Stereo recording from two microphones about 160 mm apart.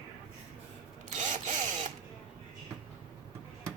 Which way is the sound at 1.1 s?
50° right (ahead or behind).